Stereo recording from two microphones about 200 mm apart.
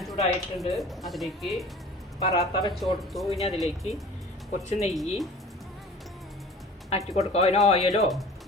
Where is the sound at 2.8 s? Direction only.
Centre (ahead or behind).